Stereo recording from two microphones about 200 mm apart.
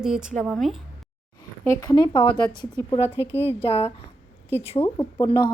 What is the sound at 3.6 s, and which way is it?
Speech, 30° left (ahead or behind).